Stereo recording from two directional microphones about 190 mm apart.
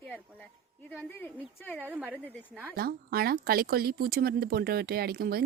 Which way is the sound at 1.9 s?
10° right (ahead or behind).